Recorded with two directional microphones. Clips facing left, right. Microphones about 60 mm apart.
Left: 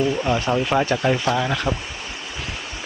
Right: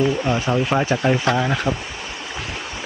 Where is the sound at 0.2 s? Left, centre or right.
Centre.